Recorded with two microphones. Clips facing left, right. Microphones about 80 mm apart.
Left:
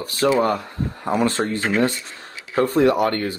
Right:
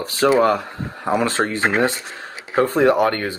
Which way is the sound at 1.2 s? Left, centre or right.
Right.